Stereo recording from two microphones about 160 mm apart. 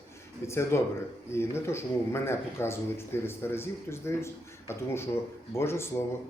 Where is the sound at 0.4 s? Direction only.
15° left (ahead or behind).